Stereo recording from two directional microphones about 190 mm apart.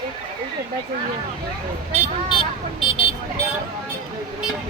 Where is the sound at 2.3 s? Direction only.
30° left (ahead or behind).